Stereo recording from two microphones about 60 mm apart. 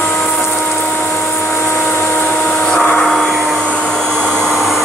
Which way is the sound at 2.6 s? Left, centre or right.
Centre.